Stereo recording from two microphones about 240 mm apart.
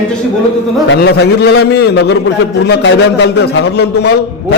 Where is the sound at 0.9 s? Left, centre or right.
Left.